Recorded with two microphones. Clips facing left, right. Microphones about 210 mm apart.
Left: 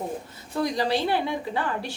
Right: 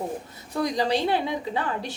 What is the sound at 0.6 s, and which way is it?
A woman's voice, 20° right (ahead or behind).